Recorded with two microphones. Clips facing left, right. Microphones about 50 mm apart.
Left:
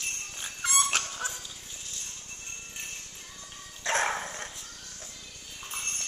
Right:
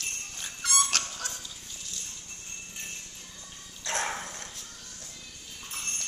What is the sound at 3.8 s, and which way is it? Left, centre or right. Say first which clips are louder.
Dog: left 4 dB; left.